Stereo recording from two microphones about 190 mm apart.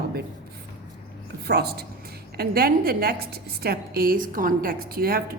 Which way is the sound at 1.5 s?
55° right (ahead or behind).